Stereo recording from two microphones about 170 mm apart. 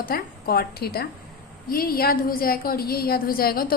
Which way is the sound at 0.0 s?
60° left (ahead or behind).